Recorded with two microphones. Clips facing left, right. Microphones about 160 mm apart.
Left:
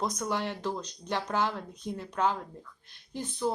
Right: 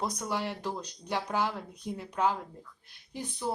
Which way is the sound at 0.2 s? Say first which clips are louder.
Left 2 dB; 5° right (ahead or behind).